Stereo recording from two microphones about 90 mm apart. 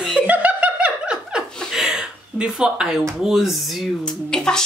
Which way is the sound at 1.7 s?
5° right (ahead or behind).